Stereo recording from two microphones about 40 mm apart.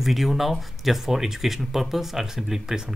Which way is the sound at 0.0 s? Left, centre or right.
Centre.